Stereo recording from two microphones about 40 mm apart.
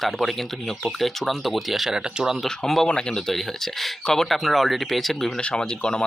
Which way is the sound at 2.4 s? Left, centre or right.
Centre.